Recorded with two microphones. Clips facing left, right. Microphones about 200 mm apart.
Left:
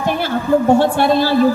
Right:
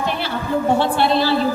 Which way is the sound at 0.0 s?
50° left (ahead or behind).